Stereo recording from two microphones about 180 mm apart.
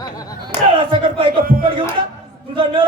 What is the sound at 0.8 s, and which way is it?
Speech, 30° right (ahead or behind).